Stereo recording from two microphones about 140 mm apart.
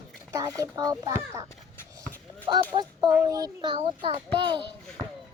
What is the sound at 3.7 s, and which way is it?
Speech, 40° right (ahead or behind).